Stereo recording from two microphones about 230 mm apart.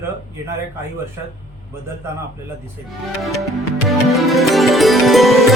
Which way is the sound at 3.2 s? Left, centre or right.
Centre.